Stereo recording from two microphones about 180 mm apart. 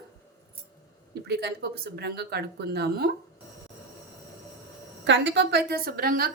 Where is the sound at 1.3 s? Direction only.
65° right (ahead or behind).